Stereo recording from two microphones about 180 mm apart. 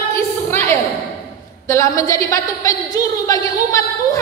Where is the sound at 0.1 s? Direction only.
15° left (ahead or behind).